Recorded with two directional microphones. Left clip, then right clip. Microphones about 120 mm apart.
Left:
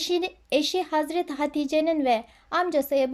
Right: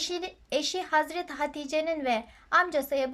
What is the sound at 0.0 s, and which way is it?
Speech, 25° left (ahead or behind).